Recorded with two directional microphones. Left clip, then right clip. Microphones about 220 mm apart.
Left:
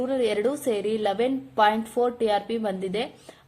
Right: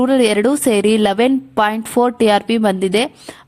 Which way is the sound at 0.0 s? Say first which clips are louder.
Right 10 dB; 45° right (ahead or behind).